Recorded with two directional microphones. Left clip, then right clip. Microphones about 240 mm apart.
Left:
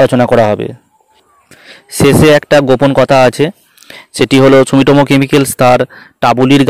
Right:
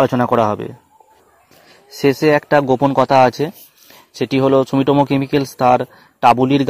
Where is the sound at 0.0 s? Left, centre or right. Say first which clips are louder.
Left 7 dB; left.